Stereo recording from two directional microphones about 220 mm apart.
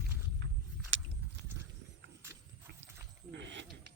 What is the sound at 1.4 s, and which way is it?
Clip-clop, 55° right (ahead or behind).